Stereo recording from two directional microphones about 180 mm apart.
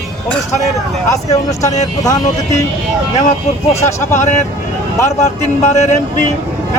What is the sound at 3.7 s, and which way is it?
Speech, 15° left (ahead or behind).